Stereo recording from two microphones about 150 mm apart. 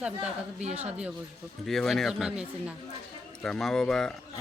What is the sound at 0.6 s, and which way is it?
Speech, 45° right (ahead or behind).